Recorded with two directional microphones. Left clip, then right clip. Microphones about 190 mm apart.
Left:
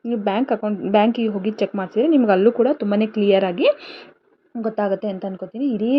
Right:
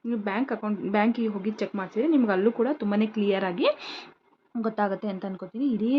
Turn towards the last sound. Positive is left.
turn(degrees=-40)  # may be behind; listen again after turning